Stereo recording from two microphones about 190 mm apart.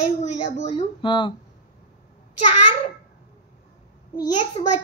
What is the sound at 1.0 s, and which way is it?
Speech, 25° left (ahead or behind).